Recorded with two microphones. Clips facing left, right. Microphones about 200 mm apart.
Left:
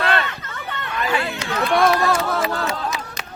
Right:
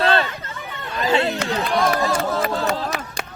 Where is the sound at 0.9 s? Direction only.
30° right (ahead or behind).